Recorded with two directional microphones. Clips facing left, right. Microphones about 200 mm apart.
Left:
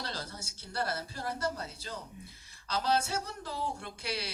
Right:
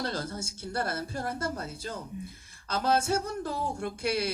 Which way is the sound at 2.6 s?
50° right (ahead or behind).